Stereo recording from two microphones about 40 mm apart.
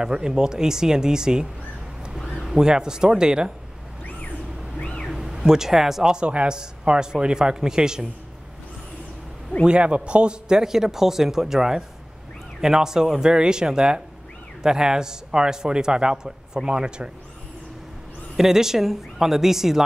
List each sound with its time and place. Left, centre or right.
0.0 s a man's voice: centre
4.7 s a sound: left
5.0 s a sound: centre
6.0 s a man's voice: right
9.7 s a man's voice: right
10.5 s a man's voice: centre
18.3 s a man's voice: centre